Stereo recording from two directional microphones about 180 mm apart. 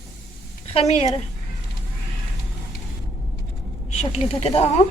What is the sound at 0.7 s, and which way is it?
Speech, 35° left (ahead or behind).